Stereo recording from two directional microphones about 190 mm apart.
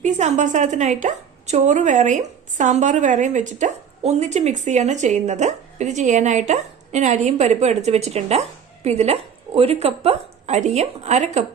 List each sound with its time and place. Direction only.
0.0 s a woman's voice: 40° right (ahead or behind)